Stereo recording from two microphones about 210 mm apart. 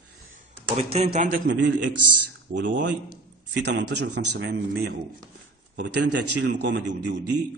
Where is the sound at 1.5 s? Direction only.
55° right (ahead or behind).